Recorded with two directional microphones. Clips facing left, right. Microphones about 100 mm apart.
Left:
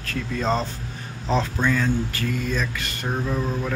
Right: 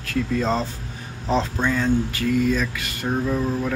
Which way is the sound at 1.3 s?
15° right (ahead or behind).